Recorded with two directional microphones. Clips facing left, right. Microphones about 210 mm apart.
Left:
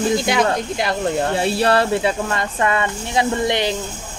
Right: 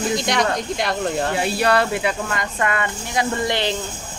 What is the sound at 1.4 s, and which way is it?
Speech, 30° left (ahead or behind).